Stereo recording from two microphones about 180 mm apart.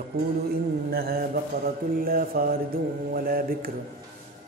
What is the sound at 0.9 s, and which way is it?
Mantra, 60° right (ahead or behind).